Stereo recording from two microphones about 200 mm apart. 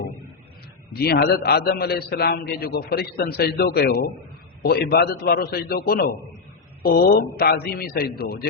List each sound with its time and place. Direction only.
0.9 s a man's voice: 50° left (ahead or behind)